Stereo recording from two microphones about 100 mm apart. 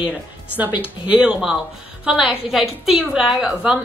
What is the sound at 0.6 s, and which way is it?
A woman's voice, 15° right (ahead or behind).